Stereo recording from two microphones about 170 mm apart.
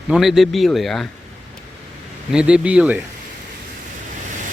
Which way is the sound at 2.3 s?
5° right (ahead or behind).